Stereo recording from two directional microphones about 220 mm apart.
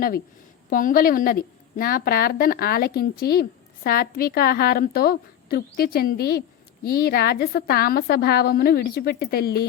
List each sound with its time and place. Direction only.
0.7 s a woman's voice: 40° left (ahead or behind)